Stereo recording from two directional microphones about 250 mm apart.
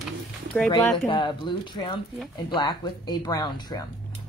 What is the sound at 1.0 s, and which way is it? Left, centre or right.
Speech, centre.